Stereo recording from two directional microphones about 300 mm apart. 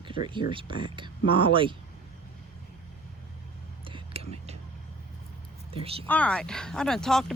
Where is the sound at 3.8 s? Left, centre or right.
Centre.